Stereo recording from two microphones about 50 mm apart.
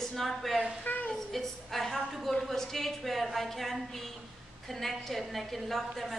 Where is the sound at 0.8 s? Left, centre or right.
Left.